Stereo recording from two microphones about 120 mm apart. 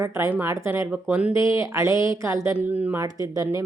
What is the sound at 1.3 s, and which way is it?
Speech, 25° right (ahead or behind).